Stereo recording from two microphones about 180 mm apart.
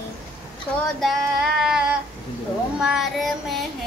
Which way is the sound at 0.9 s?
Centre (ahead or behind).